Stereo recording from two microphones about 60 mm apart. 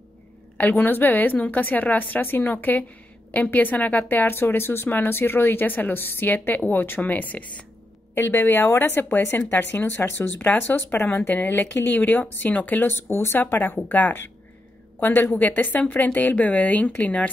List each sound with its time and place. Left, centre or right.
0.6 s a woman's voice: left
8.1 s speech: left
12.9 s a woman's voice: left